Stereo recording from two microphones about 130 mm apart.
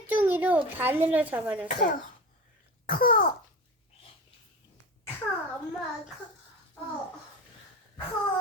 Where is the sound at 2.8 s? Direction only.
90° left.